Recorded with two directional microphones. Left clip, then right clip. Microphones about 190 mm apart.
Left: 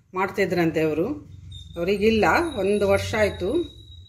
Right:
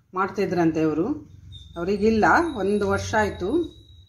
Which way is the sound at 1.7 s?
30° right (ahead or behind).